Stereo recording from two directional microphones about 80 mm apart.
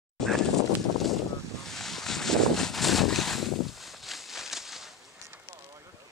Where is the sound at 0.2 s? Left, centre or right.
Centre.